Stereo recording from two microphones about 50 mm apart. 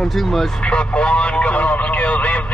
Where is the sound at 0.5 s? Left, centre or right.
Left.